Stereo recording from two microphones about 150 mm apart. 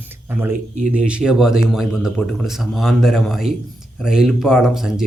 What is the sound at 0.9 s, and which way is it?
Speech, 5° right (ahead or behind).